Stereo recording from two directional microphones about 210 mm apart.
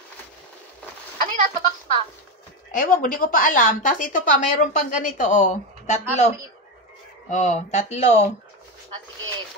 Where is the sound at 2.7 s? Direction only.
40° left (ahead or behind).